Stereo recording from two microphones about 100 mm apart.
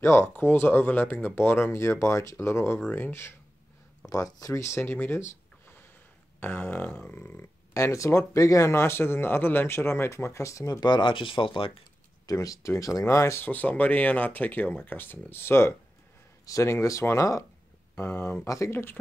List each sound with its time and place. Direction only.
0.0 s speech: 25° left (ahead or behind)
4.0 s speech: 35° left (ahead or behind)
6.4 s speech: 20° left (ahead or behind); by 11.8 s 60° left (ahead or behind)
12.3 s speech: 35° left (ahead or behind)
13.4 s speech: 15° left (ahead or behind)